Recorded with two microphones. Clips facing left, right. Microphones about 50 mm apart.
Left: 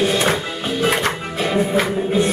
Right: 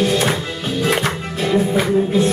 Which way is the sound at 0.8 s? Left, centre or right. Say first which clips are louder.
Even; centre.